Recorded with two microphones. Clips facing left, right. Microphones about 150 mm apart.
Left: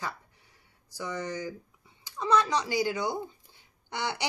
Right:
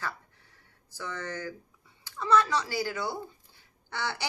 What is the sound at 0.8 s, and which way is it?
A woman's voice, 15° left (ahead or behind).